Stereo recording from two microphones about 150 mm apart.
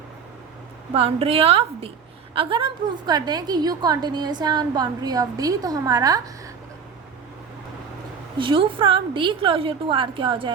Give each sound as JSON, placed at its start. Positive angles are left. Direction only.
{"t": 0.9, "sound": "a woman's voice", "side_deg": -40}
{"t": 8.4, "sound": "a woman's voice", "side_deg": -35}